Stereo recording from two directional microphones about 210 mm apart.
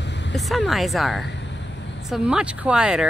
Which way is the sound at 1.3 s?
55° left (ahead or behind).